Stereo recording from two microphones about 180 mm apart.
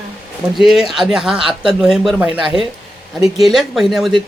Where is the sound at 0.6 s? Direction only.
Centre (ahead or behind).